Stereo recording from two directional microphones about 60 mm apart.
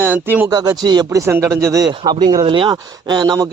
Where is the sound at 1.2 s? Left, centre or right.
Right.